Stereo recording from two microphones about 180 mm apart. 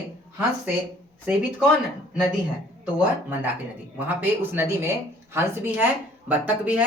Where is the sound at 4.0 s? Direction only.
10° right (ahead or behind).